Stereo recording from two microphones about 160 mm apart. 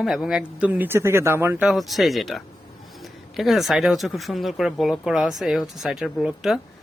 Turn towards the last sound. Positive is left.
turn(degrees=0)  # may be behind; listen again after turning